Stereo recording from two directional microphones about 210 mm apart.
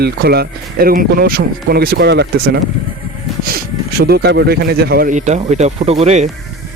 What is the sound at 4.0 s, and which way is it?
Speech, 50° right (ahead or behind).